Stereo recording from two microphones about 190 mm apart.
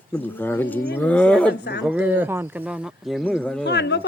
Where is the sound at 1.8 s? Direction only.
10° right (ahead or behind).